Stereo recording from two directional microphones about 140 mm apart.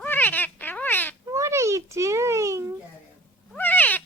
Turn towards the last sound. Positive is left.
turn(degrees=10)  # may be behind; listen again after turning